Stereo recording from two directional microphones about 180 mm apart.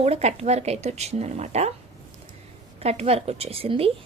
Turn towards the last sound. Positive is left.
turn(degrees=-30)  # may be behind; listen again after turning